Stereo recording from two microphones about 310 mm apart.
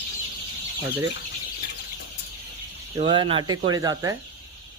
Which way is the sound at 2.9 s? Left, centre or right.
Centre.